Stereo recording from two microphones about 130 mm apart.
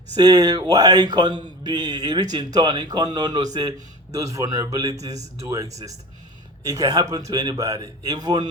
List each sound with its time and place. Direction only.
0.1 s a man's voice: 30° right (ahead or behind)
6.7 s a man's voice: 30° right (ahead or behind)